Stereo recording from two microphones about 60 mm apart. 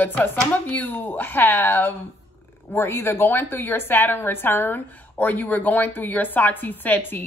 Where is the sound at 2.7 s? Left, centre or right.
Left.